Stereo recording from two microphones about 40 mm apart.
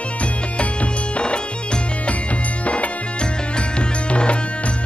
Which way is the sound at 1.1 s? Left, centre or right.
Left.